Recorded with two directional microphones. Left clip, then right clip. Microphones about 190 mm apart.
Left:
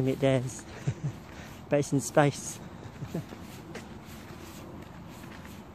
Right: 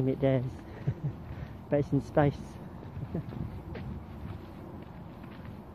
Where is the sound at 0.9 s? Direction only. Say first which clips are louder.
Left 1 dB; 15° left (ahead or behind).